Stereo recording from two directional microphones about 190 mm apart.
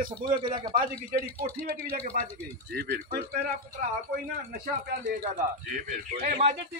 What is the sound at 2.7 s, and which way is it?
Speech, 50° right (ahead or behind).